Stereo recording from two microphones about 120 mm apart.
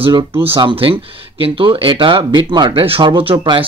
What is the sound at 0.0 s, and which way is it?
Speech, 40° right (ahead or behind).